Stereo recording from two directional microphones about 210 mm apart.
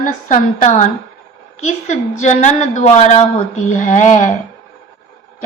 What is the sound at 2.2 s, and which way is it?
A woman's voice, 35° left (ahead or behind).